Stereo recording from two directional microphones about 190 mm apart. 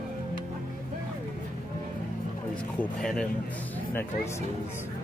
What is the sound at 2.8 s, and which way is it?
Speech, 5° left (ahead or behind).